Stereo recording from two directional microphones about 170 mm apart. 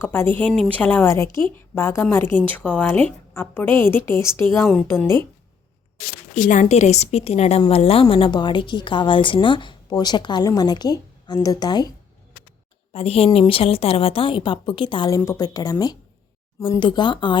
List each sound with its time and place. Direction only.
0.0 s a woman's voice: 15° left (ahead or behind)
6.3 s a woman's voice: 45° left (ahead or behind); by 11.9 s 25° left (ahead or behind)
12.9 s a woman's voice: 35° left (ahead or behind)